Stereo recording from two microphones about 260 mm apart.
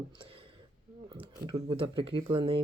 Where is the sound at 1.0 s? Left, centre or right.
Centre.